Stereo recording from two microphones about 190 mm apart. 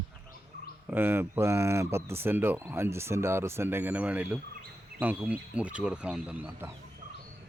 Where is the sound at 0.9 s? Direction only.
10° right (ahead or behind).